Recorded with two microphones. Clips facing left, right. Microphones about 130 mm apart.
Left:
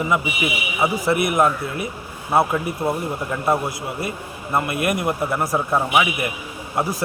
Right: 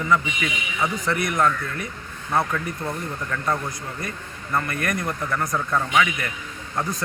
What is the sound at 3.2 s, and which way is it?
Speech, 25° left (ahead or behind).